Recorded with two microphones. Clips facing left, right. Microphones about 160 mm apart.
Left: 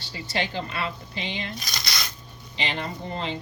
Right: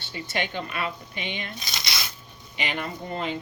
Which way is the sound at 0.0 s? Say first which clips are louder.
Left 1 dB; 20° right (ahead or behind).